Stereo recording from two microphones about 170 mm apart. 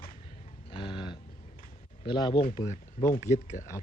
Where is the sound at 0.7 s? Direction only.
30° left (ahead or behind).